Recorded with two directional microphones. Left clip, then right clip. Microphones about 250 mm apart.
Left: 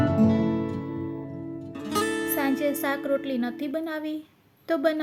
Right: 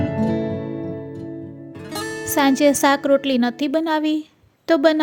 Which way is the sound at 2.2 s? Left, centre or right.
Right.